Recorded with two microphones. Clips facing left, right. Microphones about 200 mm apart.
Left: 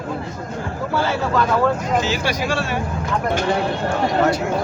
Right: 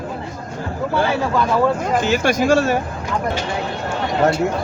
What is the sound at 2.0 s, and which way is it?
Speech, 50° right (ahead or behind).